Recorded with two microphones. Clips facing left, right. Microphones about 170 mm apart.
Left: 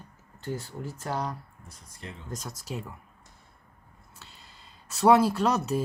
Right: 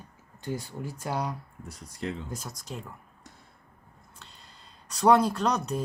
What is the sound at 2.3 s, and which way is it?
Speech, centre (ahead or behind).